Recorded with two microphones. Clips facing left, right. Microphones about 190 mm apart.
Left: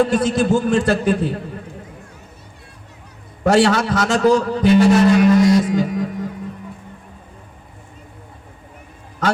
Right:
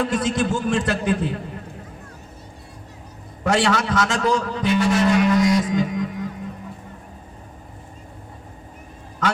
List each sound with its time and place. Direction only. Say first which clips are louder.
0.0 s a man's voice: left 5 dB; 30° left (ahead or behind)
3.5 s a man's voice: left 5 dB; 30° left (ahead or behind)